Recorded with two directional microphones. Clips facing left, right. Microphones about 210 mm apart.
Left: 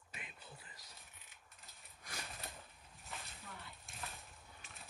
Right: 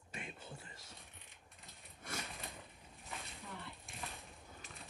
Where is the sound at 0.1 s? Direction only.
45° right (ahead or behind).